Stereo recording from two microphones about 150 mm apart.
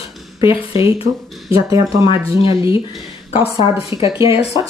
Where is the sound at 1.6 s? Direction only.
25° right (ahead or behind).